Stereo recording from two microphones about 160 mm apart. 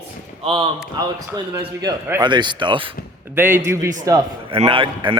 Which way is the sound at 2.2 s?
30° right (ahead or behind).